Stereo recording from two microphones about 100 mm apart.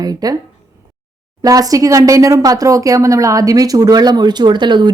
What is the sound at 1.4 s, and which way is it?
Speech, 35° right (ahead or behind).